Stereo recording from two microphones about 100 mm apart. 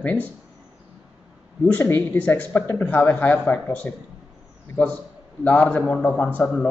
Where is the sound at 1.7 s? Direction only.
20° left (ahead or behind).